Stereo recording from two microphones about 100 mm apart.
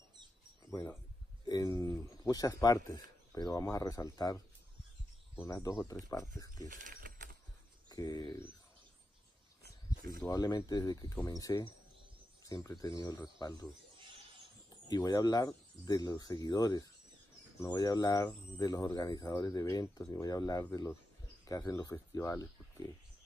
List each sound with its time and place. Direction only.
0.7 s speech: 30° left (ahead or behind)
5.3 s speech: 25° left (ahead or behind)
5.6 s speech: 35° left (ahead or behind)
7.9 s speech: 45° left (ahead or behind)
10.3 s speech: 40° left (ahead or behind)
14.9 s speech: 40° left (ahead or behind)